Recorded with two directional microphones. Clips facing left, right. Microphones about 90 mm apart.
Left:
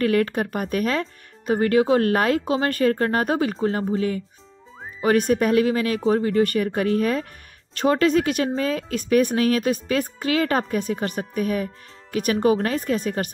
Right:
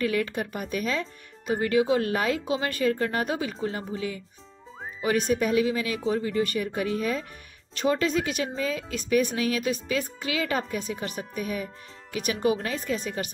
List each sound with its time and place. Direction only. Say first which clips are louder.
0.0 s speech: left 6 dB; 50° left (ahead or behind)